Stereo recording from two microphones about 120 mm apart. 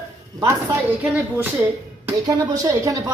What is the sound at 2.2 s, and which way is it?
Speech, 25° right (ahead or behind).